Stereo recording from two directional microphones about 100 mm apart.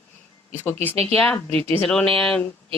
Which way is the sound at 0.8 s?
10° left (ahead or behind).